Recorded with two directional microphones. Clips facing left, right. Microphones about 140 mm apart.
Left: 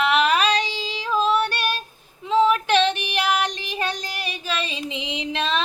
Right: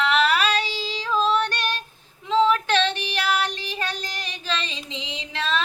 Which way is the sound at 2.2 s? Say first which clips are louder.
Left 1 dB; 15° left (ahead or behind).